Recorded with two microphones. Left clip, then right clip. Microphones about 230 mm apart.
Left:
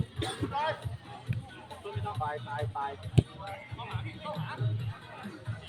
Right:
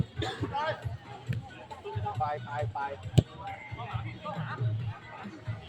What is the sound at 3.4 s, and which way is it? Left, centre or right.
Music, left.